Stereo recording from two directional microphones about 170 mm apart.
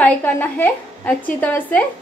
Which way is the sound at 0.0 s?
10° left (ahead or behind).